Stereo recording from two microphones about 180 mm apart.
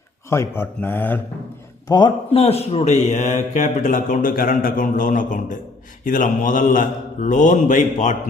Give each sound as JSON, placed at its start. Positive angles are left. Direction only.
{"t": 0.3, "sound": "speech", "side_deg": 15}
{"t": 1.9, "sound": "speech", "side_deg": 25}